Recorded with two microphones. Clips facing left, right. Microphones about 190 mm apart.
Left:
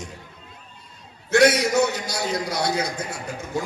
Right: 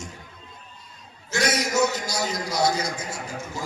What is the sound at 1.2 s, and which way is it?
A man's voice, 60° left (ahead or behind).